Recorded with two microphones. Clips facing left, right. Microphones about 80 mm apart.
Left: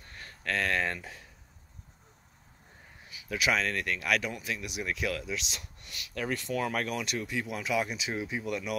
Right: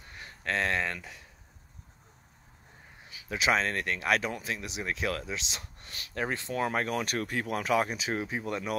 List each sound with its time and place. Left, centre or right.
0.0 s a sound: centre
0.9 s speech: left
3.1 s speech: right
7.2 s speech: right